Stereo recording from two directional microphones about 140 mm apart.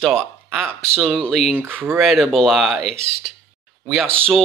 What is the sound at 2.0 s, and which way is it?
Speech, centre (ahead or behind).